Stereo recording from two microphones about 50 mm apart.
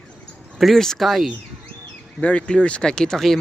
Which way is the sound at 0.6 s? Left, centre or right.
Centre.